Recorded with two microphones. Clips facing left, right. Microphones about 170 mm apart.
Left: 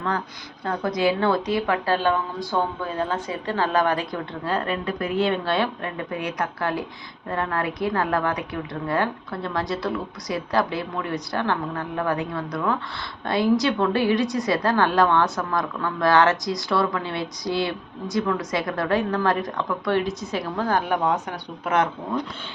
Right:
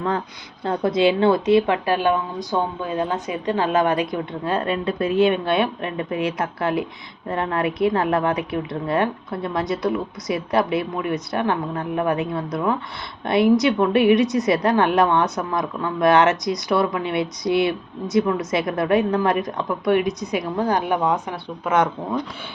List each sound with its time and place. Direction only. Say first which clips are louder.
0.6 s a woman's voice: right 4 dB; 25° right (ahead or behind)